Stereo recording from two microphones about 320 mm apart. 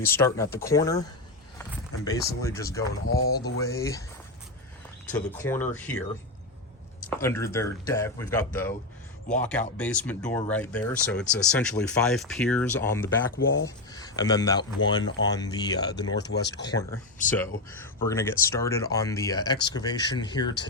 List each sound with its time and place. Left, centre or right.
0.0 s speech: centre
2.0 s speech: centre
3.1 s speech: left
3.6 s speech: centre
5.1 s speech: centre
7.2 s speech: centre
16.1 s speech: left
16.6 s speech: centre